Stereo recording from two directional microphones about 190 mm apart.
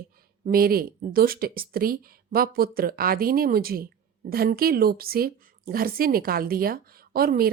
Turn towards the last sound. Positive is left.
turn(degrees=-50)  # may be behind; listen again after turning